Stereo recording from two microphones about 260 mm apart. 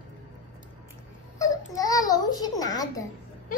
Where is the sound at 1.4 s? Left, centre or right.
Centre.